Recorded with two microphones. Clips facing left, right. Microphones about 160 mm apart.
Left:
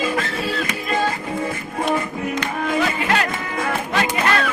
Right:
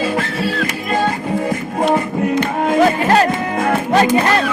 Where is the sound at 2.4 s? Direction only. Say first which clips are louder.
Right 7 dB; 45° right (ahead or behind).